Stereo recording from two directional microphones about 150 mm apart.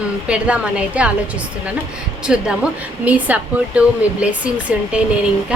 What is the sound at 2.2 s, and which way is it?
A woman's voice, 5° right (ahead or behind).